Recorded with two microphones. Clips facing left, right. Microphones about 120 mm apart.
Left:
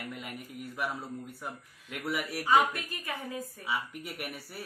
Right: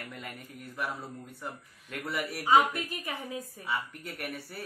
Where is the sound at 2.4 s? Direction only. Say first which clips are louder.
Right 2 dB; 20° right (ahead or behind).